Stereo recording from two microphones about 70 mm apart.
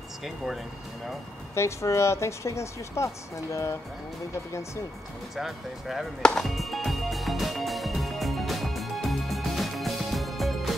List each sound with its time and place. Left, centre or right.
1.5 s a woman's voice: left
5.3 s speech: centre
6.4 s music: centre